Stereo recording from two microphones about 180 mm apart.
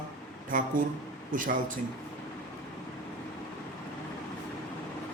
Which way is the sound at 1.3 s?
45° right (ahead or behind).